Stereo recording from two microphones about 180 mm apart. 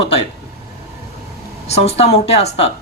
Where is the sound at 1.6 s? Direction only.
35° left (ahead or behind).